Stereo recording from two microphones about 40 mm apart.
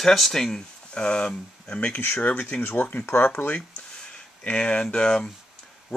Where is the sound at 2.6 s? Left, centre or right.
Left.